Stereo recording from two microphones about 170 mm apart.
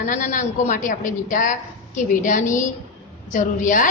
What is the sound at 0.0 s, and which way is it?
A woman's voice, 45° left (ahead or behind).